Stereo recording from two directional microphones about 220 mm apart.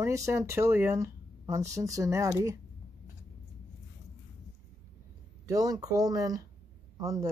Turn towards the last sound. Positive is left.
turn(degrees=-15)  # may be behind; listen again after turning